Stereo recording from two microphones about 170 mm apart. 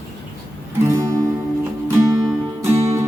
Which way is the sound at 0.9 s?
20° right (ahead or behind).